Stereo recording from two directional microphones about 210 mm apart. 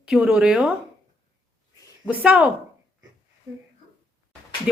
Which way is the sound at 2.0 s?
5° right (ahead or behind).